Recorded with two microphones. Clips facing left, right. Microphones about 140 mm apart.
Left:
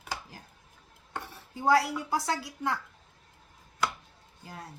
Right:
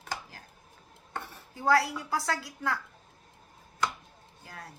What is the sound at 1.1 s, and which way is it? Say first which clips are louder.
Speech: left 1 dB; 20° left (ahead or behind).